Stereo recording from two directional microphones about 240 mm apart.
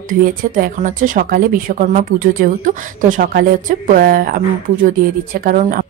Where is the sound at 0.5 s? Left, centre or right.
Right.